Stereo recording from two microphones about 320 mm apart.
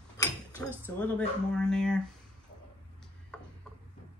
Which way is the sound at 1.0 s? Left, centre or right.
Centre.